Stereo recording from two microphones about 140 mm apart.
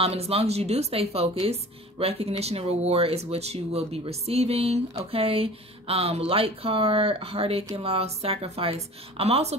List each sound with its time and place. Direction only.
0.0 s a woman's voice: 45° right (ahead or behind)